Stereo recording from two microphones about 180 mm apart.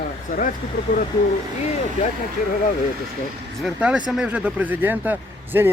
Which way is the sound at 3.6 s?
5° right (ahead or behind).